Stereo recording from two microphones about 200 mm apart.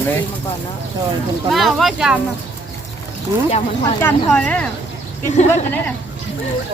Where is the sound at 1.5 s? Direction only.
Centre (ahead or behind).